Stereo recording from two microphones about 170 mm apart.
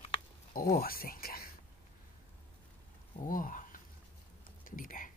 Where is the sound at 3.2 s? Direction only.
50° left (ahead or behind).